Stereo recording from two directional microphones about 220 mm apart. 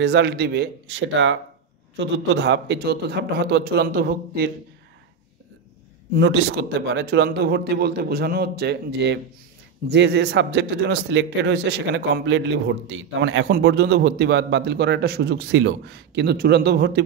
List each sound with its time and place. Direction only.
0.0 s speech: 50° right (ahead or behind)
6.1 s speech: 50° right (ahead or behind)